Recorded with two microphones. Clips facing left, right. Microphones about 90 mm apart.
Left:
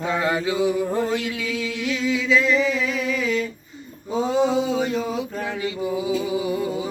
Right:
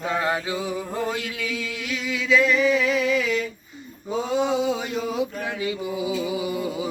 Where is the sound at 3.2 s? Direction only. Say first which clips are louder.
Left 1 dB; 35° left (ahead or behind).